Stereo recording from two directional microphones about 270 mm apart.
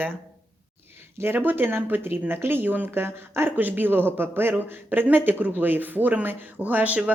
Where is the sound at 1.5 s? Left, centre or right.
Centre.